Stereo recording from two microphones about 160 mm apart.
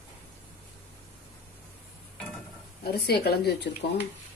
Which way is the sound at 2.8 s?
80° left.